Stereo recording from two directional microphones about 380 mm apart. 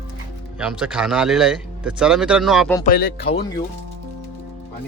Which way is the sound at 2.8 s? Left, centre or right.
Left.